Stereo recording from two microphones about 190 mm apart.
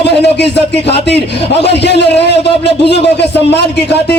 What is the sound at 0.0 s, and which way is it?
A man's voice, 60° left (ahead or behind).